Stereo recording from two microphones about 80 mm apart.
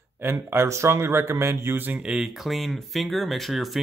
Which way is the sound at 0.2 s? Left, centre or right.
Right.